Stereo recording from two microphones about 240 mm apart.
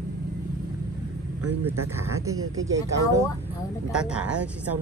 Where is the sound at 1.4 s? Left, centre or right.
Right.